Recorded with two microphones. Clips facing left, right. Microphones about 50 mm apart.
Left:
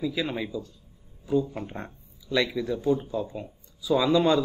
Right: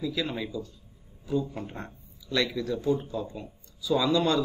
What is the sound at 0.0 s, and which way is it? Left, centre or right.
Speech, centre.